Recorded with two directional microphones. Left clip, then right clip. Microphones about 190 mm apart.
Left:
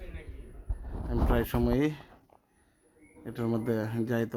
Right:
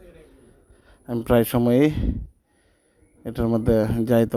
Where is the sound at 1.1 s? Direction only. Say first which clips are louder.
Right 10 dB; 45° right (ahead or behind).